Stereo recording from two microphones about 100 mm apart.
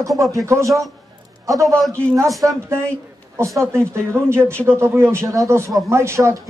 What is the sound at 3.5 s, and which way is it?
Speech, 10° left (ahead or behind).